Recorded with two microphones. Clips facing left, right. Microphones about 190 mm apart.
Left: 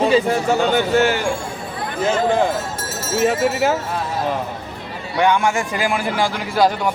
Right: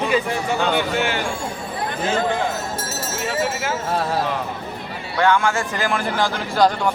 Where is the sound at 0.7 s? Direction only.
45° left (ahead or behind).